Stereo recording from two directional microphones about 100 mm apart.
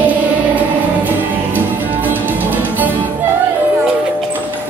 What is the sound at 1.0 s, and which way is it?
Music, 20° right (ahead or behind).